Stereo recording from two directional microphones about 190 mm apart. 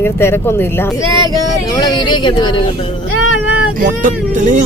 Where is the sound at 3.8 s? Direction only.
45° right (ahead or behind).